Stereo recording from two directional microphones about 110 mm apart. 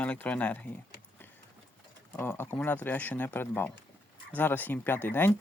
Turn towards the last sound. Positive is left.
turn(degrees=20)  # may be behind; listen again after turning